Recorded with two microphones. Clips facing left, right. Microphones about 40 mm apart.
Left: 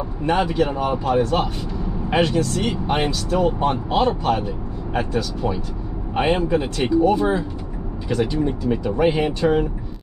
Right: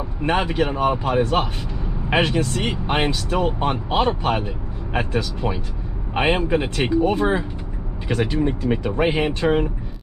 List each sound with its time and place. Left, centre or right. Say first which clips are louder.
0.2 s speech: left 1 dB; right